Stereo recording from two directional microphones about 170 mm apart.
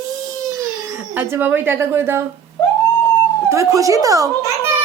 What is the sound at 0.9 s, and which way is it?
Speech, 10° right (ahead or behind).